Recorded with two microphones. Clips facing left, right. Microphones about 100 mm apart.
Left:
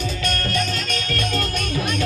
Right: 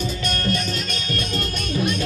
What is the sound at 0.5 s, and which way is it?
Music, 15° right (ahead or behind).